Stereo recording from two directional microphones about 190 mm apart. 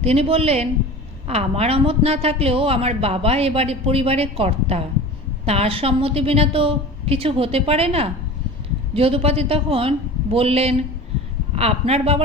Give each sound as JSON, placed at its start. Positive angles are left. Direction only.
{"t": 0.0, "sound": "a woman's voice", "side_deg": -30}